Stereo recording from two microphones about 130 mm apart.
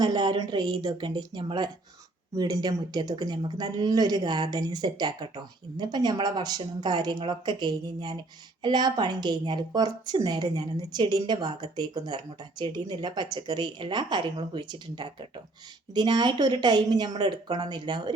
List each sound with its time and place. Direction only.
0.0 s speech: 30° right (ahead or behind)